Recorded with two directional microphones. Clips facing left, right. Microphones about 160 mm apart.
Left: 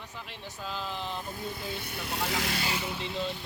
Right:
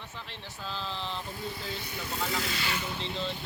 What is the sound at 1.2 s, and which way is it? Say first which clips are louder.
Speech: left 1 dB; 55° left (ahead or behind).